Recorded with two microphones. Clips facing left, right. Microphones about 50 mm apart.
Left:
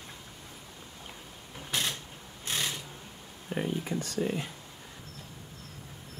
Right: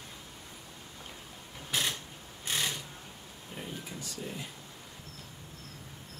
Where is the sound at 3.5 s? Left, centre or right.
Left.